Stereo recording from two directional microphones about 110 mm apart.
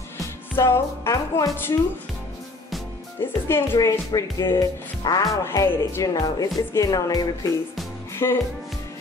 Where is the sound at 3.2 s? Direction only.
20° left (ahead or behind).